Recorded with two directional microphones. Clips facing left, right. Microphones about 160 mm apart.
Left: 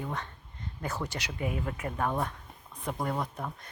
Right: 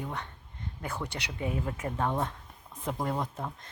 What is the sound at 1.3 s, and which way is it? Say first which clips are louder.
A woman's voice: right 2 dB; 20° right (ahead or behind).